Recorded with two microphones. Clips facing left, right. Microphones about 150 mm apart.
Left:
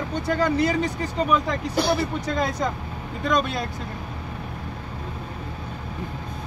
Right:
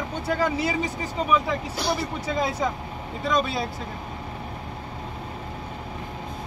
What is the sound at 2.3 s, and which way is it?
Speech, 5° right (ahead or behind).